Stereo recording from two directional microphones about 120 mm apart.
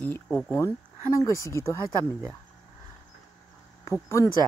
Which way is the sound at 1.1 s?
25° left (ahead or behind).